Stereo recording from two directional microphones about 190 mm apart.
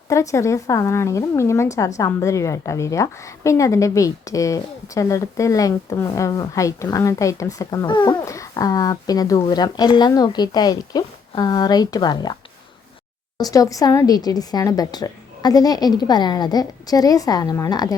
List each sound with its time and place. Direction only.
0.1 s a woman's voice: 15° left (ahead or behind)
13.4 s a woman's voice: 20° left (ahead or behind)